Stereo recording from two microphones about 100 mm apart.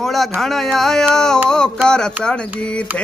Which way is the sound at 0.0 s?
5° left (ahead or behind).